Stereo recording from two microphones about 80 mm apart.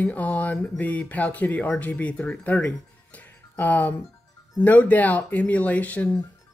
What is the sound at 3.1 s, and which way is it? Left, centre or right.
Music, left.